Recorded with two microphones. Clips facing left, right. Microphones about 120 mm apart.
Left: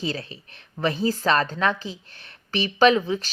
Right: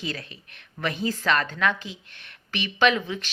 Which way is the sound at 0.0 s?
30° left (ahead or behind).